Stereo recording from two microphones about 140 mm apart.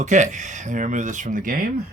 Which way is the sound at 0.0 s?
60° right (ahead or behind).